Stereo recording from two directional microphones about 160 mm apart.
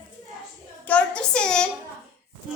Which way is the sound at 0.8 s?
10° left (ahead or behind).